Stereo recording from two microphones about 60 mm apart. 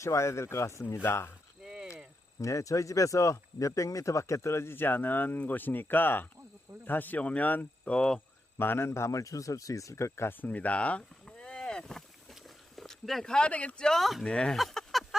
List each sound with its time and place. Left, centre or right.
0.0 s speech: left
1.6 s a sound: centre
2.4 s speech: left
7.9 s speech: centre
8.5 s speech: left
10.2 s speech: left; by 12.0 s centre
12.3 s a sound: centre
13.5 s speech: left
13.8 s speech: centre
14.3 s speech: centre
14.5 s a sound: centre